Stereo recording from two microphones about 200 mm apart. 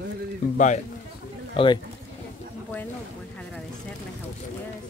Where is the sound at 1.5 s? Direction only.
25° left (ahead or behind).